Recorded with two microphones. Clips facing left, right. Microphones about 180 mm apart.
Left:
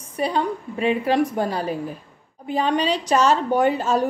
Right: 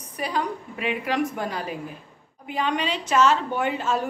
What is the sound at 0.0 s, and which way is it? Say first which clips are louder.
A woman's voice: left 5 dB; 30° left (ahead or behind).